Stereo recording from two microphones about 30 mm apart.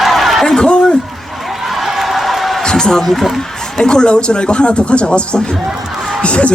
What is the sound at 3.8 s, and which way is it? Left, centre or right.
Speech, left.